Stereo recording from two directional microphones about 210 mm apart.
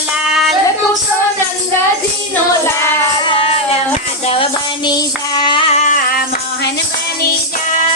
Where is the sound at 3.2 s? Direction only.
25° left (ahead or behind).